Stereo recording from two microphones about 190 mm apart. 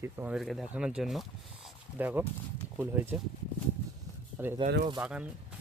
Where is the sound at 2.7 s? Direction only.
10° right (ahead or behind).